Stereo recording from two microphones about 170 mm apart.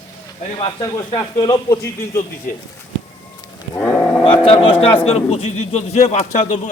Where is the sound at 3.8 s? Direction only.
10° left (ahead or behind).